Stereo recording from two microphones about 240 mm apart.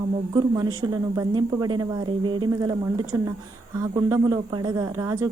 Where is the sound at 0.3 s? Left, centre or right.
Centre.